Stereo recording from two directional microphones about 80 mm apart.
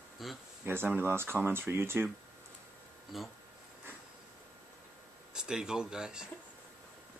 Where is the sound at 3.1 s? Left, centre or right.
Centre.